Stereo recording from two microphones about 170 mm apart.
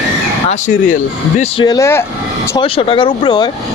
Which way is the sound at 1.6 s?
20° left (ahead or behind).